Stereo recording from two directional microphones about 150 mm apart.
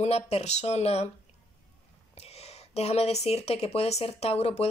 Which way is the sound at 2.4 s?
45° left (ahead or behind).